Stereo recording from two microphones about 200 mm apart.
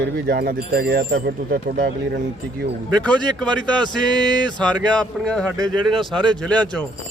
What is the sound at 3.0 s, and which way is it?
Speech, 5° left (ahead or behind).